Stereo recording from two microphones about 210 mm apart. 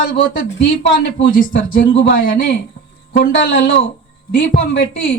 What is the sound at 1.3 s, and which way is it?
Speech, 40° left (ahead or behind).